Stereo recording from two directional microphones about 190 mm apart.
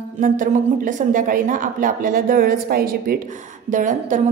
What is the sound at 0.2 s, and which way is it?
Speech, 45° right (ahead or behind).